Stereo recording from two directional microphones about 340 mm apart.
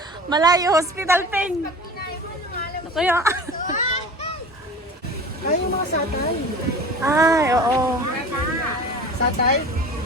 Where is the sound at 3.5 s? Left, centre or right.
Left.